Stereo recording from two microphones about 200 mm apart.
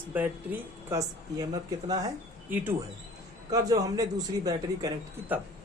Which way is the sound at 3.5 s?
20° right (ahead or behind).